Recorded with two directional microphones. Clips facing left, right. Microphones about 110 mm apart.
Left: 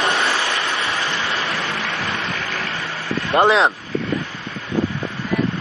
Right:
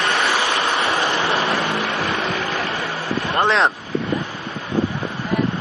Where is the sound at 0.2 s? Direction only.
15° right (ahead or behind).